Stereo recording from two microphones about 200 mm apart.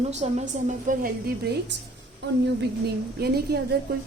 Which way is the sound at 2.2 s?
60° right (ahead or behind).